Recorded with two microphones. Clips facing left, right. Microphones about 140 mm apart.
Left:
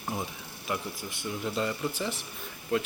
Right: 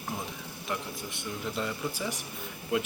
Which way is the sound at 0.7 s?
Centre (ahead or behind).